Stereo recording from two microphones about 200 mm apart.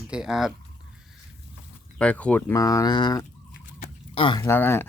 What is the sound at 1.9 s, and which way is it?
Speech, 5° left (ahead or behind).